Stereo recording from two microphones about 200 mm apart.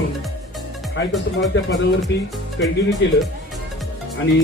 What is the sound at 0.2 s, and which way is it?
Music, centre (ahead or behind).